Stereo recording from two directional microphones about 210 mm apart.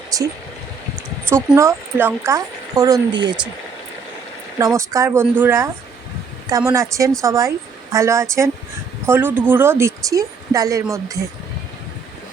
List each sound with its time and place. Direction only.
0.1 s speech: 15° right (ahead or behind)
1.3 s a woman's voice: 10° right (ahead or behind)
4.5 s a woman's voice: 15° right (ahead or behind)